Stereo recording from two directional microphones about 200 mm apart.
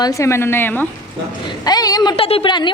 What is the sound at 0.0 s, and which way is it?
A woman's voice, 15° left (ahead or behind).